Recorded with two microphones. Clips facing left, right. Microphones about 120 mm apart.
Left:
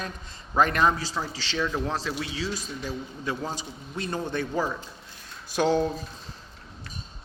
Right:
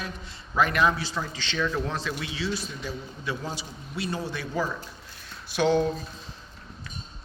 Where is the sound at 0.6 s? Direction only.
40° left (ahead or behind).